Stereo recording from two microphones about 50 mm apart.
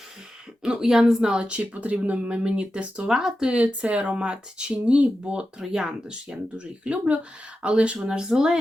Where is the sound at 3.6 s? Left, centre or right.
Right; by 6.4 s centre.